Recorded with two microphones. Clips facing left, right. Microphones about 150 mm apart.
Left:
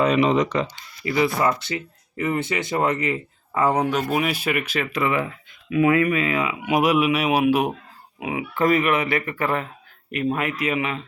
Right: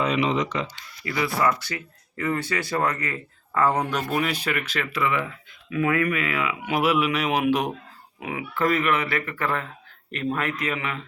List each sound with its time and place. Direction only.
0.0 s speech: 45° left (ahead or behind)
1.0 s speech: 25° left (ahead or behind)